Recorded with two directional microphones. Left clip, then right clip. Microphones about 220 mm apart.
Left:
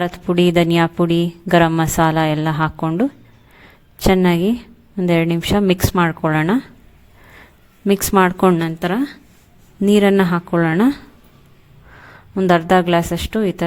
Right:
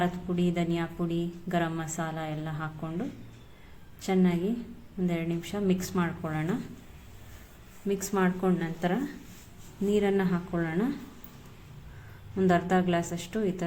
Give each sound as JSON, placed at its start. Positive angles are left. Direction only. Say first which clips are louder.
{"t": 0.0, "sound": "speech", "louder": "left 13 dB", "side_deg": 45}
{"t": 7.9, "sound": "speech", "louder": "left 14 dB", "side_deg": 50}
{"t": 12.4, "sound": "speech", "louder": "left 12 dB", "side_deg": 45}